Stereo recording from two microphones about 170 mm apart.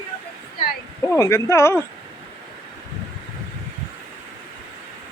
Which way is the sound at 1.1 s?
20° left (ahead or behind).